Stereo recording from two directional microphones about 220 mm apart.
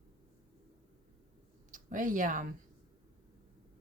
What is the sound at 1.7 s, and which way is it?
Speech, 35° right (ahead or behind).